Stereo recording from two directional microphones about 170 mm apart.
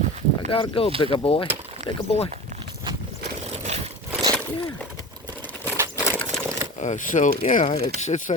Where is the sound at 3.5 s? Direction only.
40° right (ahead or behind).